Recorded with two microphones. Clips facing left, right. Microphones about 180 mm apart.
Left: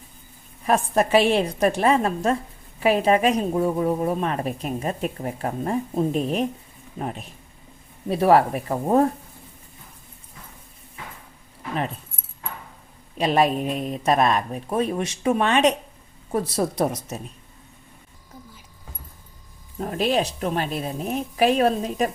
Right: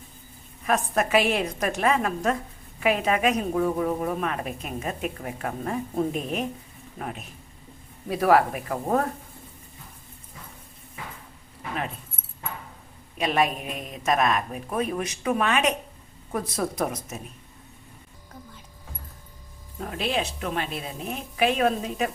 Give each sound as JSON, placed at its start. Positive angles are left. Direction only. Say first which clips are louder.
{"t": 0.7, "sound": "speech", "louder": "left 4 dB", "side_deg": 30}
{"t": 8.1, "sound": "speech", "louder": "left 3 dB", "side_deg": 30}
{"t": 13.1, "sound": "speech", "louder": "left 4 dB", "side_deg": 30}
{"t": 19.8, "sound": "speech", "louder": "left 5 dB", "side_deg": 40}